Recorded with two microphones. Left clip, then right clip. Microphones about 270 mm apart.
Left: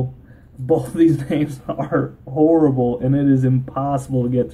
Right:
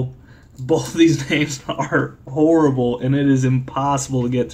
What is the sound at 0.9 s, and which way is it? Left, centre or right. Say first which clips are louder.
Speech: right 1 dB; centre.